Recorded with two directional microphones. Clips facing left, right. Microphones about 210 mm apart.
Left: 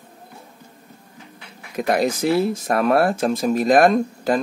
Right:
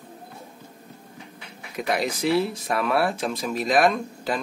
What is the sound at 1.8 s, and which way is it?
Speech, 45° left (ahead or behind).